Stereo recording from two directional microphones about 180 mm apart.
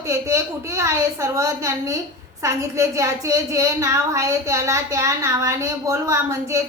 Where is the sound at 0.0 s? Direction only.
15° right (ahead or behind).